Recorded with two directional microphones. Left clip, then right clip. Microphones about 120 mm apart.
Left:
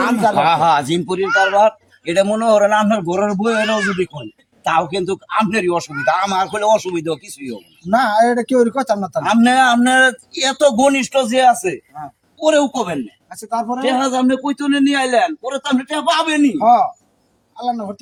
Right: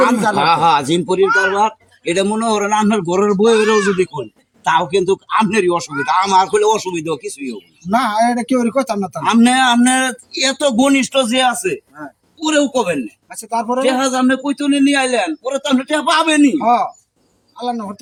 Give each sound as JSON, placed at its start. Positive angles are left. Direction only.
{"t": 0.0, "sound": "a man's voice", "side_deg": 20}
{"t": 4.7, "sound": "speech", "side_deg": 15}